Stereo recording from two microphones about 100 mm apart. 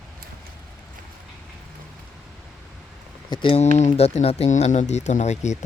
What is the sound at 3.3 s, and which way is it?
Speech, 55° left (ahead or behind).